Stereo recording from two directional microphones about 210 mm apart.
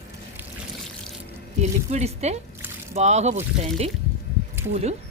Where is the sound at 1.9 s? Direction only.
30° right (ahead or behind).